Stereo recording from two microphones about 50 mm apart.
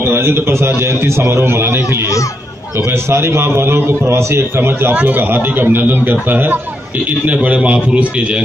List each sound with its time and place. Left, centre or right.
0.0 s a man's voice: right
7.1 s a man's voice: right